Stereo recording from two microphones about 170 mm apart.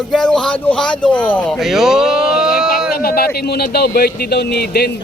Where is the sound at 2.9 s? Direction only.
60° left (ahead or behind).